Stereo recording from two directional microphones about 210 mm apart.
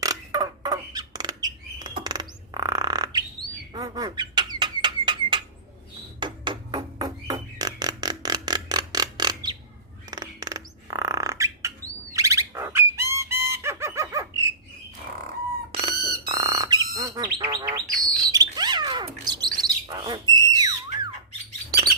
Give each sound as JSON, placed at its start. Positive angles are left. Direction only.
{"t": 0.0, "sound": "rodents", "side_deg": -15}
{"t": 3.7, "sound": "a sound", "side_deg": -15}
{"t": 6.1, "sound": "music", "side_deg": -20}
{"t": 10.1, "sound": "bird", "side_deg": -15}
{"t": 15.7, "sound": "a sound", "side_deg": -25}
{"t": 16.9, "sound": "bird", "side_deg": -15}